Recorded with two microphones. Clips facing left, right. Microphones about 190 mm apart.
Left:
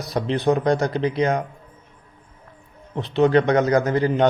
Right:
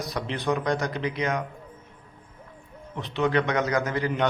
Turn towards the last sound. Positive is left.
turn(degrees=30)  # may be behind; listen again after turning